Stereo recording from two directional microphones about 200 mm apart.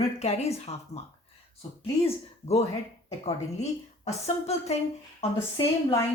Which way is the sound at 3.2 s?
35° left (ahead or behind).